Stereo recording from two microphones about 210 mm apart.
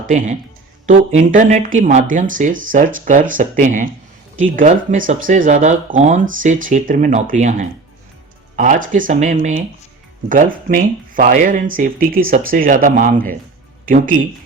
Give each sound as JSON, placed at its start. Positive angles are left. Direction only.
{"t": 0.1, "sound": "speech", "side_deg": -40}